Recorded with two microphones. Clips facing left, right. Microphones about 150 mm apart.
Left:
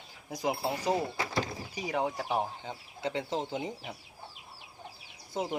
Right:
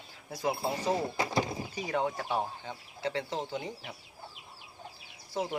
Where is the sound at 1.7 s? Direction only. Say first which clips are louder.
Even; 10° left (ahead or behind).